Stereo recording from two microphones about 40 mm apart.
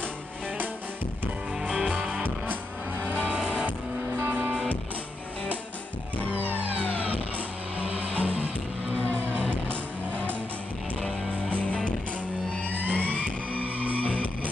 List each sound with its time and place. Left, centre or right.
1.8 s music: right
3.3 s music: centre
4.3 s music: right
7.8 s music: right
8.9 s music: left
11.0 s music: centre
11.5 s music: left
12.9 s music: left